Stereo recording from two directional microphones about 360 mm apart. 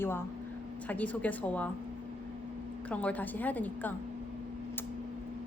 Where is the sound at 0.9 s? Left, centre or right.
Centre.